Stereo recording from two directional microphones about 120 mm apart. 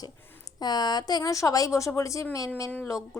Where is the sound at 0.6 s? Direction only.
35° left (ahead or behind).